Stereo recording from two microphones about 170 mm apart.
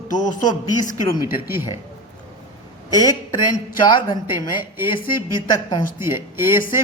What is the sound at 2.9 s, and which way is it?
Speech, 20° left (ahead or behind).